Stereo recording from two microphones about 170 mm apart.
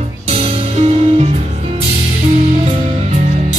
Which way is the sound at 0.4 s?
35° right (ahead or behind).